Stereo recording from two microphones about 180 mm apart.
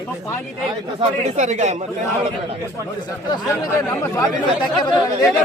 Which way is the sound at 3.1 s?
25° left (ahead or behind).